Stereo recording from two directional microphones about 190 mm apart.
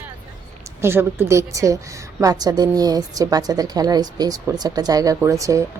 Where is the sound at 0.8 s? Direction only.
10° right (ahead or behind).